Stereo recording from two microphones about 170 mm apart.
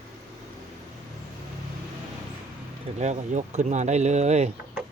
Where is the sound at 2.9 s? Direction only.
45° right (ahead or behind).